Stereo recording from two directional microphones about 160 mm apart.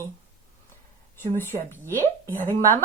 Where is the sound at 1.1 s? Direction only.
15° left (ahead or behind).